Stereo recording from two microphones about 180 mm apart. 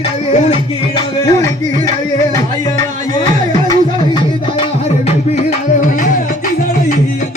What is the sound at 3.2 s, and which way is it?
Music, 20° left (ahead or behind).